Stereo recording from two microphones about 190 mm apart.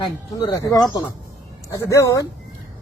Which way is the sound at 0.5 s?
20° left (ahead or behind).